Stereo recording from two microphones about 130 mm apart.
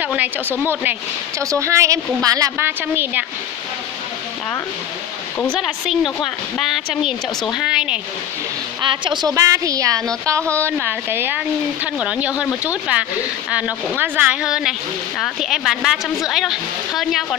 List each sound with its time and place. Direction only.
0.0 s speech: 10° right (ahead or behind)
1.4 s a woman's voice: 25° right (ahead or behind)
2.9 s speech: 15° right (ahead or behind)
7.1 s speech: 5° right (ahead or behind)
8.8 s a woman's voice: 35° right (ahead or behind)
10.6 s speech: 15° right (ahead or behind); by 17.4 s centre (ahead or behind)